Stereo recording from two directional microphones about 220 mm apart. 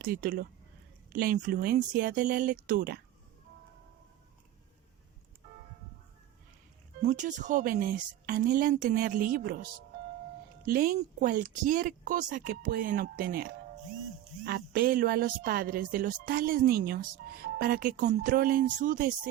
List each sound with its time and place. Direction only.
0.0 s speech: 40° right (ahead or behind)
7.0 s speech: 35° right (ahead or behind)
10.7 s speech: 40° right (ahead or behind)